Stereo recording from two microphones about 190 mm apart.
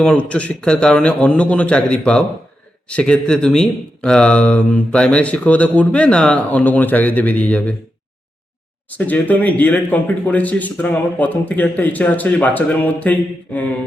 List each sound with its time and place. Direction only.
0.0 s a man's voice: 5° left (ahead or behind)
8.9 s speech: 10° left (ahead or behind)